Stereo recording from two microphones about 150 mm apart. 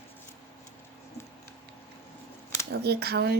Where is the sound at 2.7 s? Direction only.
90° right.